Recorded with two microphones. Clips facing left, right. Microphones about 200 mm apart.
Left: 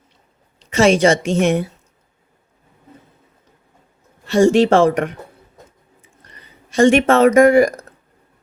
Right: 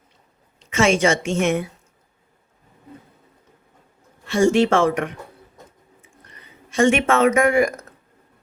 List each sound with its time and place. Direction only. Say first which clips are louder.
0.7 s a woman's voice: left 5 dB; 35° left (ahead or behind)
4.3 s a woman's voice: left 4 dB; 35° left (ahead or behind)
6.4 s speech: left 4 dB; 35° left (ahead or behind)